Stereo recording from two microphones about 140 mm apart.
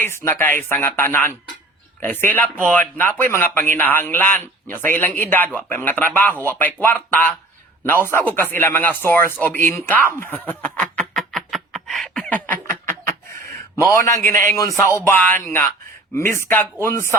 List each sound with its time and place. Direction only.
0.0 s a man's voice: 15° left (ahead or behind)
10.2 s a sound: 10° left (ahead or behind)
13.9 s a man's voice: 20° left (ahead or behind)